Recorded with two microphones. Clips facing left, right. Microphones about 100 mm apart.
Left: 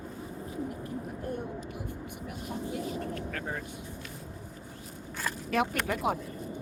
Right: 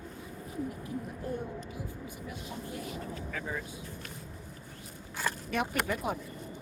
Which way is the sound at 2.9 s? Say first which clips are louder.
Left 3 dB; 70° left (ahead or behind).